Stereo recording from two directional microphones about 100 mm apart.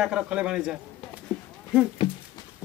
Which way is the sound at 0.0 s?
10° right (ahead or behind).